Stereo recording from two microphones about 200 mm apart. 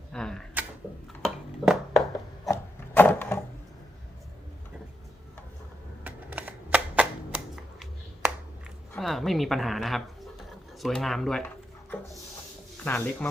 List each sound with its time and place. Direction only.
0.1 s a sound: 5° left (ahead or behind)
2.5 s wood: 10° left (ahead or behind)
6.1 s typewriter: 10° right (ahead or behind)
9.0 s a woman's voice: centre (ahead or behind)